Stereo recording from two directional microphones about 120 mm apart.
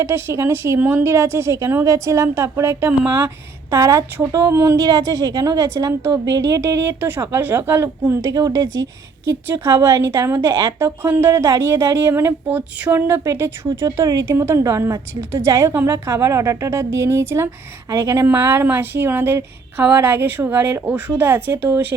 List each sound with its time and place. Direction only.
0.0 s speech: 20° right (ahead or behind)
3.8 s speech: 30° right (ahead or behind)